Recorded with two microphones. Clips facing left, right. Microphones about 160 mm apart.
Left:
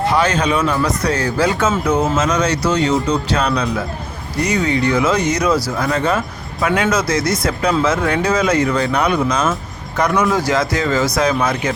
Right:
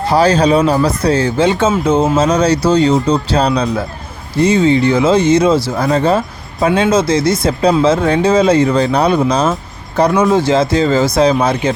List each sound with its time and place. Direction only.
0.1 s speech: 35° right (ahead or behind)